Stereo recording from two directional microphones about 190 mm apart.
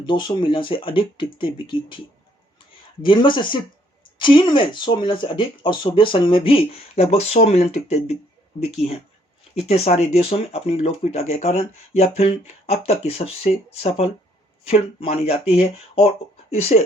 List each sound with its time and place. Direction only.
0.0 s speech: 25° left (ahead or behind)
3.0 s speech: 25° left (ahead or behind)
9.6 s speech: 35° left (ahead or behind)